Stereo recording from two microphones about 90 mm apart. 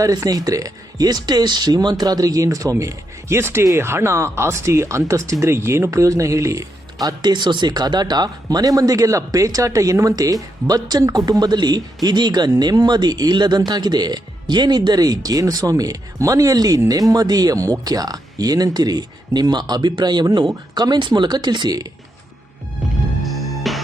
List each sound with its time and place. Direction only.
0.0 s speech: 40° right (ahead or behind)
23.2 s music: centre (ahead or behind)